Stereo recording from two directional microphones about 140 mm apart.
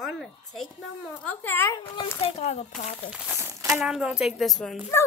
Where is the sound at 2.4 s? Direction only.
55° left (ahead or behind).